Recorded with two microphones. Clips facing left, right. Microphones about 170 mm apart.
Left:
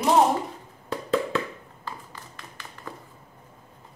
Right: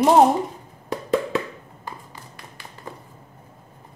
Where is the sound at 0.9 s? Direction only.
15° right (ahead or behind).